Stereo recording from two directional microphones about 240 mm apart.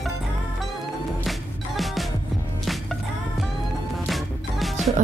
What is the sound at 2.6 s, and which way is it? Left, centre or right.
Music, centre.